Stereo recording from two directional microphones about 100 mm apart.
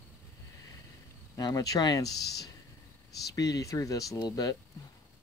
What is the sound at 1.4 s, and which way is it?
Speech, 40° left (ahead or behind).